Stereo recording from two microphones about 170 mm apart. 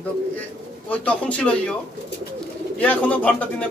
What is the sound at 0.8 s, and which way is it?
Speech, 5° left (ahead or behind).